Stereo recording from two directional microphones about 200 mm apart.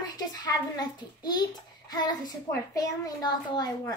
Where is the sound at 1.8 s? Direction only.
20° left (ahead or behind).